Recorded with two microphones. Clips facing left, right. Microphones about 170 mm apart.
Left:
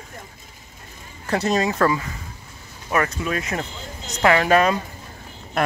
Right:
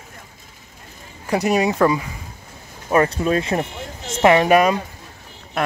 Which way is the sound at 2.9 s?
30° right (ahead or behind).